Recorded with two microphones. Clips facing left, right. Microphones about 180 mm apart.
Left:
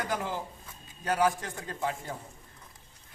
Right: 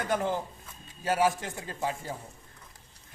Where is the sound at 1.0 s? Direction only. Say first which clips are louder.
Right 1 dB; 25° right (ahead or behind).